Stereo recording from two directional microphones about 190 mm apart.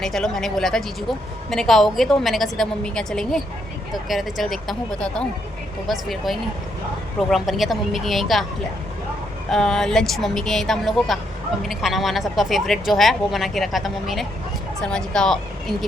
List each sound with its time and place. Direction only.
0.0 s a woman's voice: centre (ahead or behind)
9.5 s a woman's voice: centre (ahead or behind)